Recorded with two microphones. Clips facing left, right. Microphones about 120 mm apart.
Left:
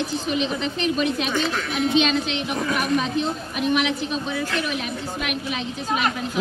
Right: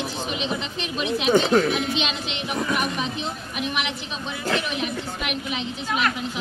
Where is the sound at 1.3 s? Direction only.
35° right (ahead or behind).